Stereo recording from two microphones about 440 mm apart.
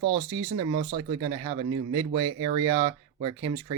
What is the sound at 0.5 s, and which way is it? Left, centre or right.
Speech, centre.